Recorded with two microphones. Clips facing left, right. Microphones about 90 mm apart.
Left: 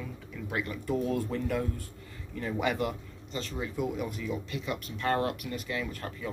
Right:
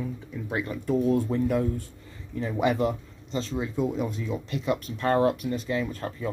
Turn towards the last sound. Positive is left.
turn(degrees=-30)  # may be behind; listen again after turning